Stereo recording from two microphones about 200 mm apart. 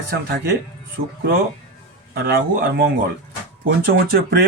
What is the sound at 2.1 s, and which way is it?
Speech, 50° right (ahead or behind).